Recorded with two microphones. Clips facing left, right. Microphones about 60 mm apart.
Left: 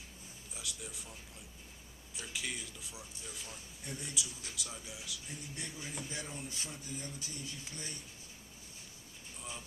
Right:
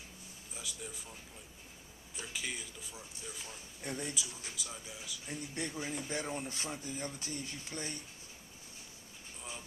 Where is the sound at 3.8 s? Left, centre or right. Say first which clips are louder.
Right 6 dB; right.